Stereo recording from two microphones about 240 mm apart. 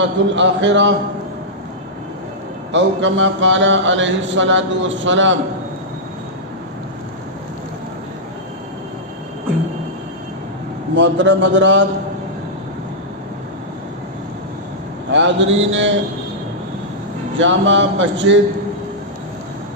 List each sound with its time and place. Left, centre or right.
0.0 s mantra: right
2.7 s mantra: right
10.9 s mantra: right
15.1 s mantra: right
17.3 s mantra: right